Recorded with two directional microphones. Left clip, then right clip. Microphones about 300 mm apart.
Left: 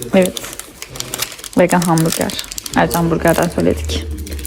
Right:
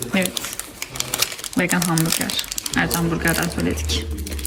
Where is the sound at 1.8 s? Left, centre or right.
Centre.